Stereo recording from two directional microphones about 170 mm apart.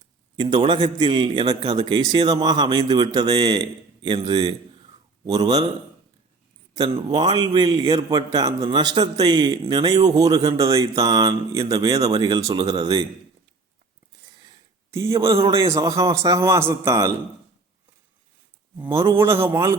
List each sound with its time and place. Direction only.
0.3 s a man's voice: 30° right (ahead or behind)
6.7 s a man's voice: 30° right (ahead or behind)
14.8 s a man's voice: 15° right (ahead or behind)
18.9 s a man's voice: 15° right (ahead or behind)